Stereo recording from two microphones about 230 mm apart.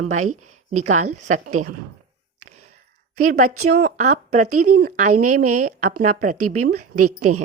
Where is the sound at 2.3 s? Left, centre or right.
Right.